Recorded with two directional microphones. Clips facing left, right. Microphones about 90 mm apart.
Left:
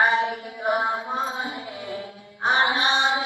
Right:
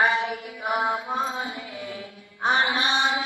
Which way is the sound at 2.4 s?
35° left (ahead or behind).